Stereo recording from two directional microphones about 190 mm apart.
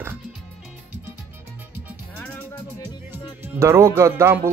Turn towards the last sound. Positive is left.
turn(degrees=-15)  # may be behind; listen again after turning